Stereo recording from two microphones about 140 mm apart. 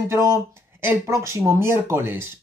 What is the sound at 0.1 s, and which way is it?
Speech, 20° right (ahead or behind).